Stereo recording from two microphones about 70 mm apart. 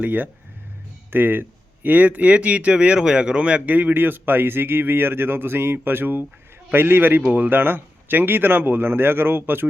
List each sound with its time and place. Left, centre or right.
0.0 s speech: right